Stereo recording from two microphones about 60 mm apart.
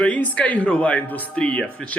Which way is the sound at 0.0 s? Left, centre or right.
Left.